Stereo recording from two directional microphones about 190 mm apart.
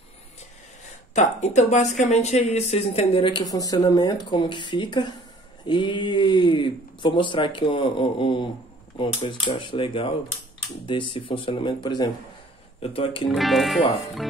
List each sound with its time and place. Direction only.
1.1 s speech: 40° left (ahead or behind)
13.3 s speech: centre (ahead or behind)